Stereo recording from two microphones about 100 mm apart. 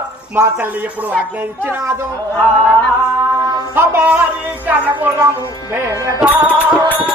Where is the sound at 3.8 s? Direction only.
20° right (ahead or behind).